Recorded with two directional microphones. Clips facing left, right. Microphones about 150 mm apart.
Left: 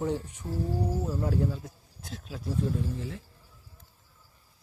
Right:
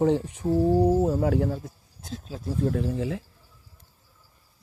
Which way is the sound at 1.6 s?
25° right (ahead or behind).